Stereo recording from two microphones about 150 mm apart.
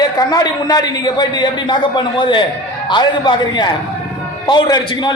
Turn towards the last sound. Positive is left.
turn(degrees=30)  # may be behind; listen again after turning